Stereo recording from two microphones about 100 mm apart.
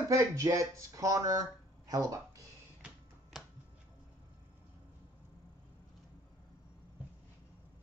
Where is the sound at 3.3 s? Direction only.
5° right (ahead or behind).